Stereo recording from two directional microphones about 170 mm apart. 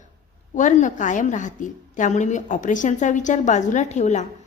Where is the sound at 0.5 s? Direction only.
45° left (ahead or behind).